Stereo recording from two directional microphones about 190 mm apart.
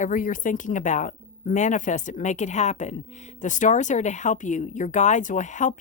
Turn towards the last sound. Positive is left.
turn(degrees=40)  # may be behind; listen again after turning